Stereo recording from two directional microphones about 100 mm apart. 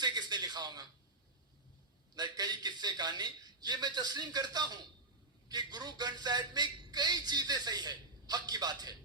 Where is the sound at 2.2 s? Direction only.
40° right (ahead or behind).